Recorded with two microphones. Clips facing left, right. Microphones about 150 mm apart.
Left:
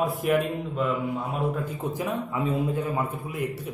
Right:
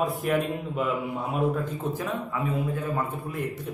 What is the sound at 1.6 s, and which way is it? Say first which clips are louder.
A man's voice: left 1 dB; 10° left (ahead or behind).